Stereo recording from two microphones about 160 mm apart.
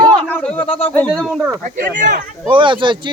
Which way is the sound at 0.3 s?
10° left (ahead or behind).